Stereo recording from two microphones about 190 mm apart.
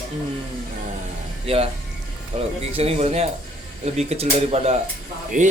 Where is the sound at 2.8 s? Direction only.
35° right (ahead or behind).